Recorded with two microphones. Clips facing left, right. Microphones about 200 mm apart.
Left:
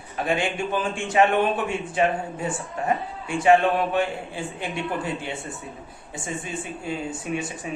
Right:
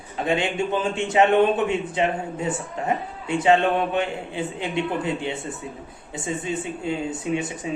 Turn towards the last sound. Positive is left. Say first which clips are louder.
# right 3 dB
turn(degrees=-20)  # may be behind; listen again after turning